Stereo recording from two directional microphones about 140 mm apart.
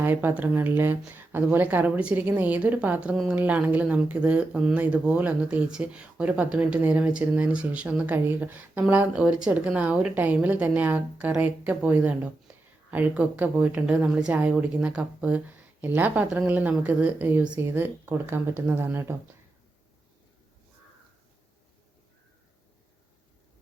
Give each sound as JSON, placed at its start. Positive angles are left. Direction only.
{"t": 0.0, "sound": "speech", "side_deg": -15}